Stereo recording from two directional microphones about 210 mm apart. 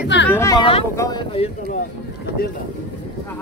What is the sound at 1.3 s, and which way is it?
Speech, 30° left (ahead or behind).